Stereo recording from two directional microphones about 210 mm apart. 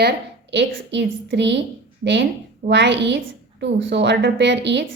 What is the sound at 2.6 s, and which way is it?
A woman's voice, 55° right (ahead or behind).